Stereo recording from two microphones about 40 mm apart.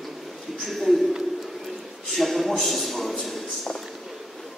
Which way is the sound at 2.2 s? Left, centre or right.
Centre.